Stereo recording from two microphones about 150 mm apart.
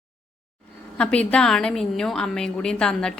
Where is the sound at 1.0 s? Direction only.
5° left (ahead or behind).